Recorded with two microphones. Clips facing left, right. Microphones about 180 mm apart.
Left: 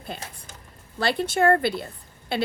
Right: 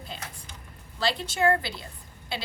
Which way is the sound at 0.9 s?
55° left (ahead or behind).